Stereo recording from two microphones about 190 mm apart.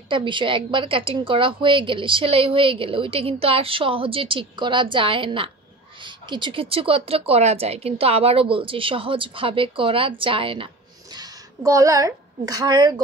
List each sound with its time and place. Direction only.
0.1 s speech: 25° right (ahead or behind)